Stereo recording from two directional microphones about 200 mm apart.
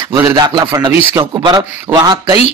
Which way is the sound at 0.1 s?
20° right (ahead or behind).